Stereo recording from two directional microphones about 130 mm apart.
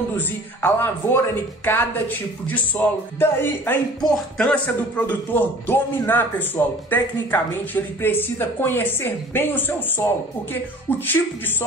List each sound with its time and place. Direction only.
0.2 s speech: 15° left (ahead or behind)